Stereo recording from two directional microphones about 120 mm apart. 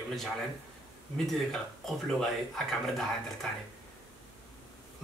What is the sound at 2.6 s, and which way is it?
Speech, 5° left (ahead or behind).